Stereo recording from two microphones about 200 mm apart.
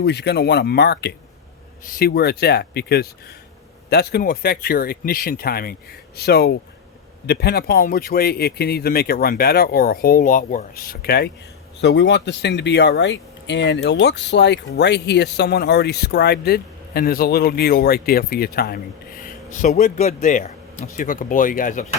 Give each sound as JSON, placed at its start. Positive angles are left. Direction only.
{"t": 0.0, "sound": "speech", "side_deg": 55}
{"t": 19.6, "sound": "a man's voice", "side_deg": 35}